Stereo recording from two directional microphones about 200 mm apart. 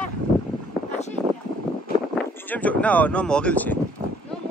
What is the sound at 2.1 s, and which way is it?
Speech, 5° left (ahead or behind).